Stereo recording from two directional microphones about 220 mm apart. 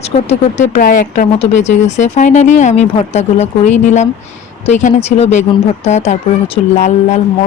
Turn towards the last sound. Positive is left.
turn(degrees=30)  # may be behind; listen again after turning